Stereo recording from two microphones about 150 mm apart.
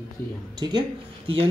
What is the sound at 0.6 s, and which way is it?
Speech, 30° right (ahead or behind).